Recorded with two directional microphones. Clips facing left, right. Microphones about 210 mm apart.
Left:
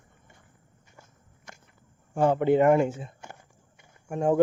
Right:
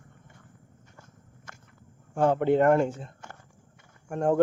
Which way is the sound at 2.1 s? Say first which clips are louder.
Left 1 dB; 5° left (ahead or behind).